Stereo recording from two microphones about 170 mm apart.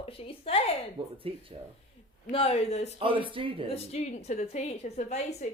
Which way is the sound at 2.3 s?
35° left (ahead or behind).